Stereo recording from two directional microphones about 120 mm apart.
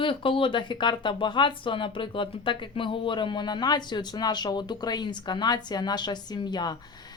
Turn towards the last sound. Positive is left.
turn(degrees=35)  # may be behind; listen again after turning